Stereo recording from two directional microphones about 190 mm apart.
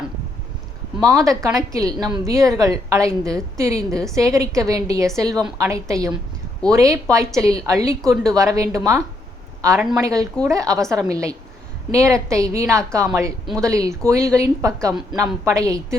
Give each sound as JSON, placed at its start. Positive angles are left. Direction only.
{"t": 1.0, "sound": "a woman's voice", "side_deg": -15}